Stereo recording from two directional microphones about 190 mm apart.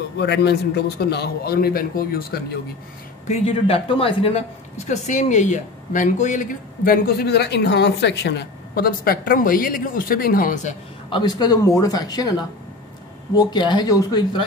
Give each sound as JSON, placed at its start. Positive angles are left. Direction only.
{"t": 0.2, "sound": "a man's voice", "side_deg": 60}
{"t": 3.3, "sound": "speech", "side_deg": 35}
{"t": 11.1, "sound": "speech", "side_deg": 25}